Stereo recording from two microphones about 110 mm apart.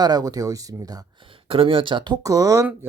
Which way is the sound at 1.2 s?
55° right (ahead or behind).